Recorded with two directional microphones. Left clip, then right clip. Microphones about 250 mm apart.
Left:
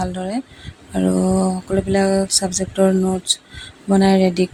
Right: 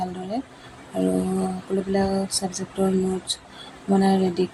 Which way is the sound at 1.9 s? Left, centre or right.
Left.